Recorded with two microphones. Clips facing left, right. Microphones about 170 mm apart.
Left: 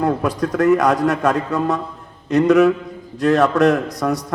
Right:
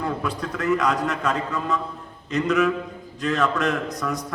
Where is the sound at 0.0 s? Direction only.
50° left (ahead or behind).